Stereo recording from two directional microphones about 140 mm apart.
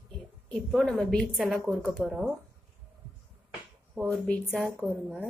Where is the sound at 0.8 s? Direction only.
5° left (ahead or behind).